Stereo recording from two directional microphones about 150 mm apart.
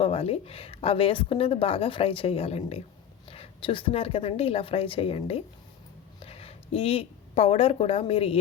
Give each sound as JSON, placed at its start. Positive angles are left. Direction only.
{"t": 0.0, "sound": "a woman's voice", "side_deg": 40}